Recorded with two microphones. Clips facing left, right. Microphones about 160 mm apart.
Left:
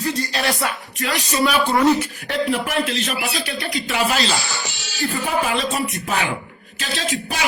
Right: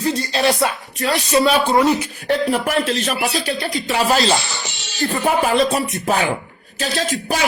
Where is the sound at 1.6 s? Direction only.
15° right (ahead or behind).